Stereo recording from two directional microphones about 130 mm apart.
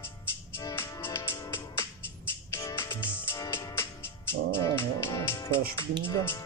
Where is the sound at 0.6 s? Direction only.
25° left (ahead or behind).